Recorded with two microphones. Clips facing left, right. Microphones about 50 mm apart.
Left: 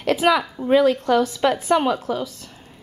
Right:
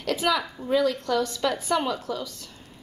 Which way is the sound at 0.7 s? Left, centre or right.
Left.